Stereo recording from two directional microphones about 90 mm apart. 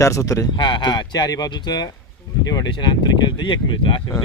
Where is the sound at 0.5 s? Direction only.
55° left (ahead or behind).